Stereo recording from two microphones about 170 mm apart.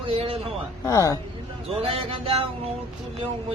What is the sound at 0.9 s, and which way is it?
Speech, 20° left (ahead or behind).